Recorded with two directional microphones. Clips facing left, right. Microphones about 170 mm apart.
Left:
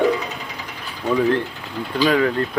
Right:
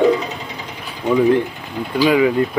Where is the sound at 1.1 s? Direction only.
15° right (ahead or behind).